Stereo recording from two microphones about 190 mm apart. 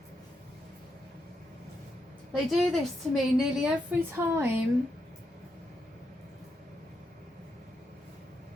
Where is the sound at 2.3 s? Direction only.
Centre (ahead or behind).